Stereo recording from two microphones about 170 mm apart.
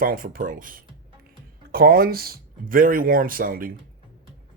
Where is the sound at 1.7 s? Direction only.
65° right (ahead or behind).